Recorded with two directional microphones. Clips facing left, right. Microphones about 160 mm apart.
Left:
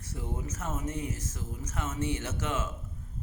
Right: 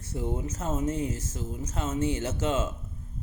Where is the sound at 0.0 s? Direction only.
30° right (ahead or behind).